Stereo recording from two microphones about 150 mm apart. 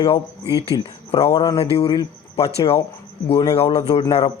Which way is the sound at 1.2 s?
35° left (ahead or behind).